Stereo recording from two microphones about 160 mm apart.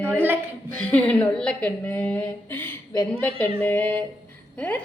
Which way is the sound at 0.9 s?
10° left (ahead or behind).